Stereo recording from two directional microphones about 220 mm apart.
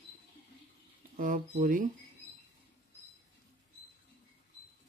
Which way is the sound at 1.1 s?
40° right (ahead or behind).